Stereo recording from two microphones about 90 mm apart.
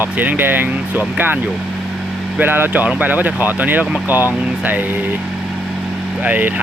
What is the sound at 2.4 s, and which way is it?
Speech, 20° right (ahead or behind).